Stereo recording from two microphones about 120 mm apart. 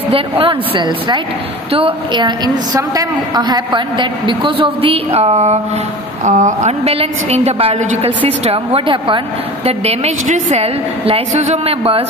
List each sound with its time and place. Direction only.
0.1 s a woman's voice: 45° right (ahead or behind); by 5.6 s 60° right (ahead or behind)
6.2 s a woman's voice: 90° right; by 9.2 s 45° right (ahead or behind)
9.7 s a woman's voice: 60° right (ahead or behind)